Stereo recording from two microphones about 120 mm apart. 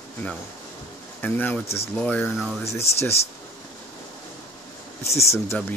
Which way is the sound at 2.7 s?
60° left (ahead or behind).